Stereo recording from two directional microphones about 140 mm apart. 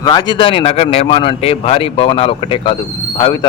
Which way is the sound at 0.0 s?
30° left (ahead or behind).